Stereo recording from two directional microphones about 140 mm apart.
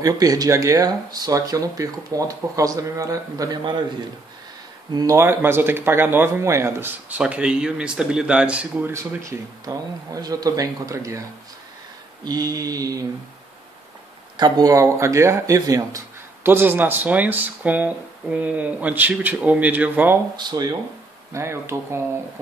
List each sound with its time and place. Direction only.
0.0 s speech: 25° right (ahead or behind)
4.9 s speech: 20° right (ahead or behind)
8.9 s speech: 20° right (ahead or behind)
12.3 s speech: 25° right (ahead or behind)
14.3 s speech: 30° right (ahead or behind); by 20.2 s 10° right (ahead or behind)
20.3 s speech: 30° right (ahead or behind)